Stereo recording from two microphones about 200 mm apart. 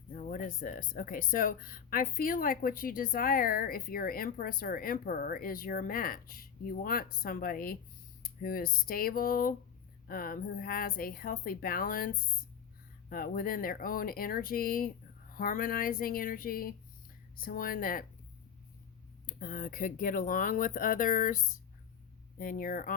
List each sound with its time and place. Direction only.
0.1 s speech: 40° left (ahead or behind)
19.2 s speech: 45° left (ahead or behind)